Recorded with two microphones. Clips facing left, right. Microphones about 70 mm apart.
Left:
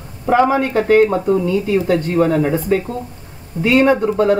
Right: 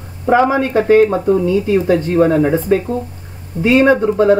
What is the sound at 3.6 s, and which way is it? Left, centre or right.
Speech, right.